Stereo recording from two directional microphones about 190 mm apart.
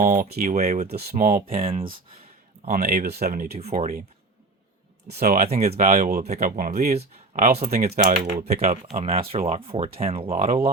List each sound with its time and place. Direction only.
0.0 s speech: 45° right (ahead or behind)
1.5 s speech: 30° right (ahead or behind)
2.6 s speech: 50° right (ahead or behind)
3.8 s speech: 40° right (ahead or behind)
5.0 s speech: 60° right (ahead or behind)
5.3 s speech: 45° right (ahead or behind)
5.7 s speech: 35° right (ahead or behind)
6.6 s speech: 50° right (ahead or behind)
8.6 s speech: 35° right (ahead or behind)